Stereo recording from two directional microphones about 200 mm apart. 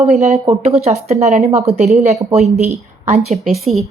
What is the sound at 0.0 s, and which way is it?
Speech, 35° right (ahead or behind).